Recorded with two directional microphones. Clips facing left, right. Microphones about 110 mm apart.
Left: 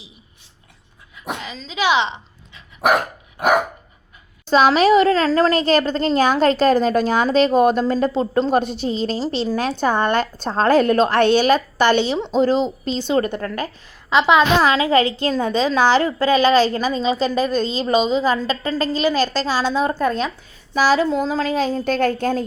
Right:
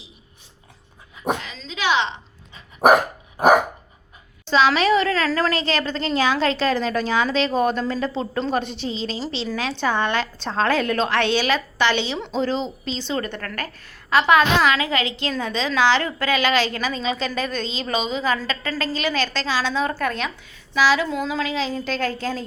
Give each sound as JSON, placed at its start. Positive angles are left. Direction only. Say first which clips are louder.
{"t": 1.5, "sound": "speech", "louder": "left 3 dB", "side_deg": 5}
{"t": 4.4, "sound": "a woman's voice", "louder": "left 4 dB", "side_deg": 45}
{"t": 5.5, "sound": "a woman's voice", "louder": "left 7 dB", "side_deg": 45}
{"t": 13.1, "sound": "a woman's voice", "louder": "left 9 dB", "side_deg": 40}
{"t": 14.1, "sound": "a woman's voice", "louder": "left 2 dB", "side_deg": 20}
{"t": 14.6, "sound": "a woman's voice", "louder": "left 5 dB", "side_deg": 35}
{"t": 19.9, "sound": "a woman's voice", "louder": "left 5 dB", "side_deg": 30}
{"t": 20.7, "sound": "a woman's voice", "louder": "left 3 dB", "side_deg": 45}